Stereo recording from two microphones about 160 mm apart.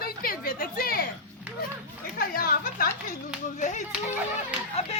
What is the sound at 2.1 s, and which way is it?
A woman's voice, 65° left (ahead or behind).